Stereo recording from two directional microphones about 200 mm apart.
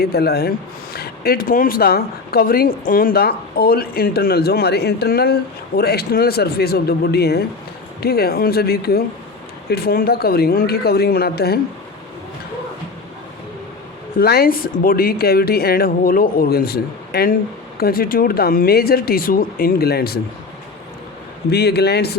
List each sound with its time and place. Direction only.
0.0 s speech: 50° left (ahead or behind)
14.2 s speech: 50° left (ahead or behind)
21.5 s a man's voice: 55° left (ahead or behind)